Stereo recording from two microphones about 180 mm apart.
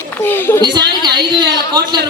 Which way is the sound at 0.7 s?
25° right (ahead or behind).